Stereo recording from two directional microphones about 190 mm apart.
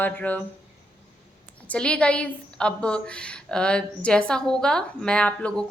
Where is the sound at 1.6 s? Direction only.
5° left (ahead or behind).